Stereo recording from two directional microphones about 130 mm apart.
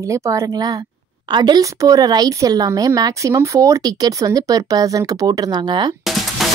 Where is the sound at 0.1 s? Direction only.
25° right (ahead or behind).